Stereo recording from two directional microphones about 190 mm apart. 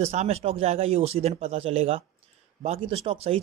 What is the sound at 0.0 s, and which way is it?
Speech, 35° right (ahead or behind).